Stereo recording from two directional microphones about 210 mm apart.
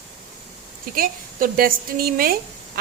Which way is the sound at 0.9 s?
45° right (ahead or behind).